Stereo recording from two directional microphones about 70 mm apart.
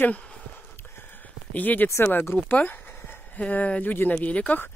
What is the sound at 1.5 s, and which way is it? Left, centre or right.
Speech, left.